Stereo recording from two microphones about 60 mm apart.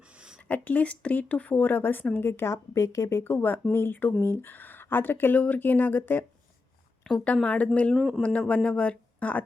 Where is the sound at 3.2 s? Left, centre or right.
Left.